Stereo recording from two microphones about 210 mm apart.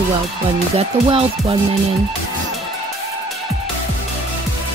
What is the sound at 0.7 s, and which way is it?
Music, 25° right (ahead or behind).